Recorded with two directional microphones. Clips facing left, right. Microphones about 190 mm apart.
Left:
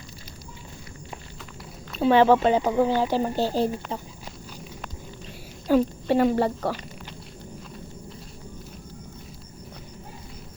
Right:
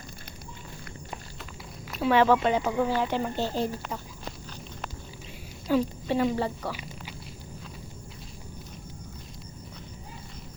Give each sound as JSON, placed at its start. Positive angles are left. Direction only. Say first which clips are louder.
{"t": 2.0, "sound": "speech", "louder": "left 4 dB", "side_deg": 30}
{"t": 5.6, "sound": "a woman's voice", "louder": "left 5 dB", "side_deg": 50}